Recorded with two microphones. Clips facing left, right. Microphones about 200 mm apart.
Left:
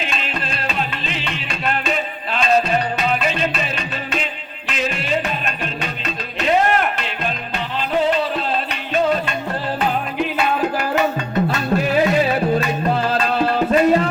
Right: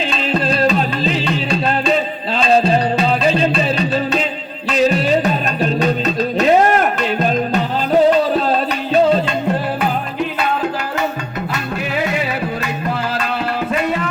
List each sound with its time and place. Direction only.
0.1 s music: 35° right (ahead or behind)
6.4 s music: 40° right (ahead or behind)